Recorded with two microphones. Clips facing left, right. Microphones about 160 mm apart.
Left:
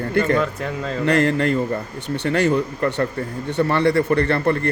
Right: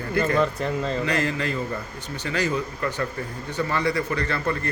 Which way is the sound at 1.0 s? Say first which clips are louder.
Left 7 dB; 60° left (ahead or behind).